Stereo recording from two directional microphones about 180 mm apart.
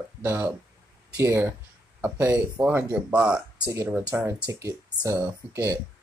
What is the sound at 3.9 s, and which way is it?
Speech, 5° right (ahead or behind).